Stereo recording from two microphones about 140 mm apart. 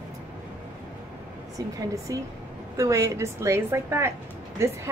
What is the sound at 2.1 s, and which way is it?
A woman's voice, 25° right (ahead or behind).